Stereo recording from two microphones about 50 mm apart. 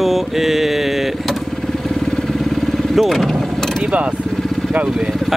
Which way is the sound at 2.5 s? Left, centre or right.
Centre.